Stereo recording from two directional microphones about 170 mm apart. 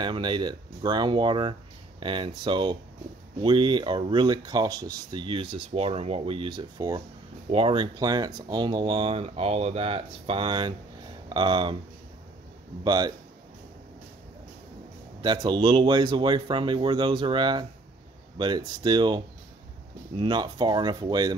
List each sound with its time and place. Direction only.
0.0 s speech: 25° right (ahead or behind)
12.8 s speech: 25° right (ahead or behind)
15.2 s speech: 25° right (ahead or behind)